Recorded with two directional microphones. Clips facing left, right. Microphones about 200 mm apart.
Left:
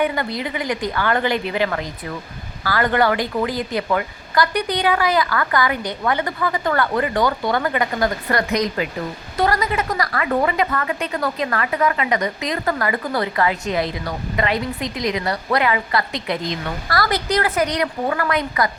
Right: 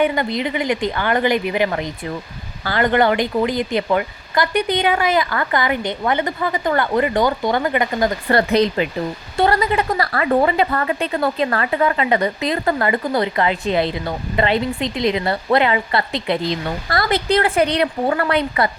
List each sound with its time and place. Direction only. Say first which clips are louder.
0.0 s a woman's voice: right 3 dB; 20° right (ahead or behind)